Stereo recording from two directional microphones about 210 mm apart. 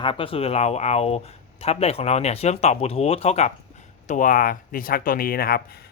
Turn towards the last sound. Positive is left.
turn(degrees=45)  # may be behind; listen again after turning